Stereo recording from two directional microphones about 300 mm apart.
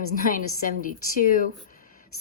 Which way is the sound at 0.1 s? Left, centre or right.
Left.